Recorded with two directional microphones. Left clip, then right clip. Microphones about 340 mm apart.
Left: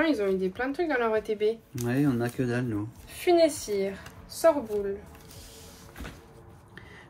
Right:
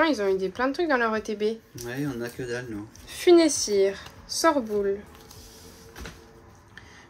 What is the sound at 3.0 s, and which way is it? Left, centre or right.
Speech, centre.